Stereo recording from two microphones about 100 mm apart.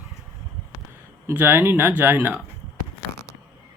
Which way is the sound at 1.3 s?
15° right (ahead or behind).